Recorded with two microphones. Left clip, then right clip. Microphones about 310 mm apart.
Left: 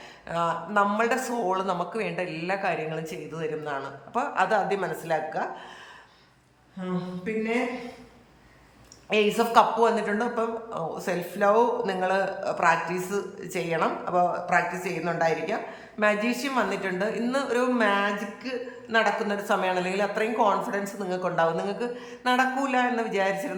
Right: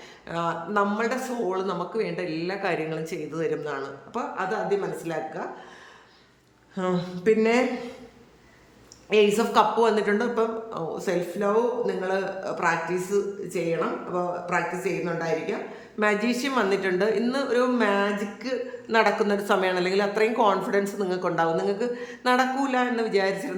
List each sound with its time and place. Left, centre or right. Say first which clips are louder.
0.3 s a man's voice: left 1 dB; centre
6.7 s speech: right 6 dB; centre
9.0 s a man's voice: right 3 dB; centre